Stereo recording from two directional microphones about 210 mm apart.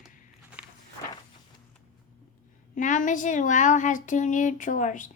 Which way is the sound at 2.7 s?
35° left (ahead or behind).